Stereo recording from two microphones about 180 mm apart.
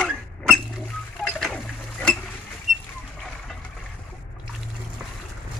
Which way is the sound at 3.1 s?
5° left (ahead or behind).